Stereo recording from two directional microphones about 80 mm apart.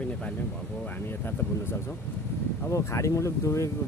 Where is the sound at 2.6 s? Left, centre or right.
Left.